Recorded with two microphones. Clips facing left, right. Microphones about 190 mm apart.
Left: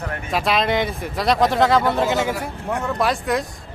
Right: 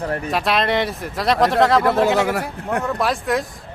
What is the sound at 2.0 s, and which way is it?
Speech, 65° right (ahead or behind).